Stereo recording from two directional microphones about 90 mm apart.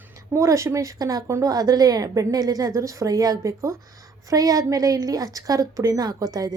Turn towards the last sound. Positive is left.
turn(degrees=-40)  # may be behind; listen again after turning